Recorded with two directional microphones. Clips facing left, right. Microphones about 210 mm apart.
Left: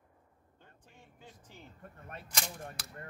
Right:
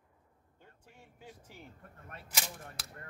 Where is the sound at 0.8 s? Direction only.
10° right (ahead or behind).